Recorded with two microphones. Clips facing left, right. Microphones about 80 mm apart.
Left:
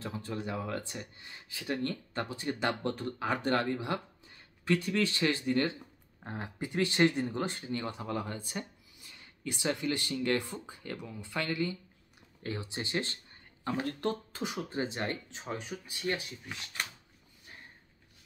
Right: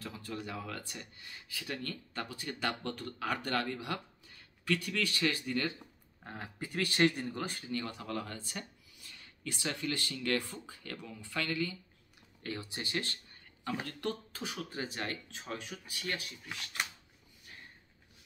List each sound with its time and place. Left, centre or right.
0.0 s speech: left